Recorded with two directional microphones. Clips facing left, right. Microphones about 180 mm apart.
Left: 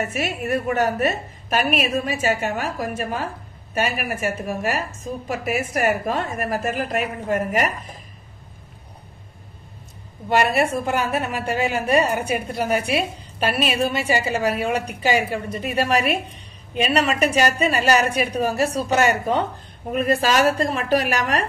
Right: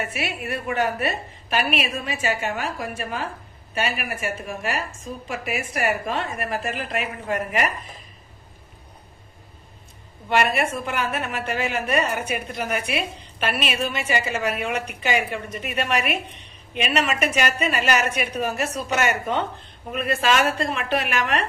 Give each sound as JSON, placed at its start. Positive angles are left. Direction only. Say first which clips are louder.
{"t": 0.0, "sound": "a woman's voice", "louder": "left 4 dB", "side_deg": 40}
{"t": 10.5, "sound": "a woman's voice", "louder": "left 4 dB", "side_deg": 35}